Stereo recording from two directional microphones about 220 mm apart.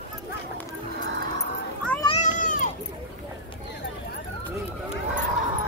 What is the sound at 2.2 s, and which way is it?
Cat, 35° left (ahead or behind).